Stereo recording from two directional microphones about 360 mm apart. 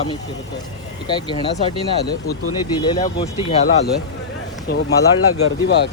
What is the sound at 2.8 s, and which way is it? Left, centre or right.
Speech, centre.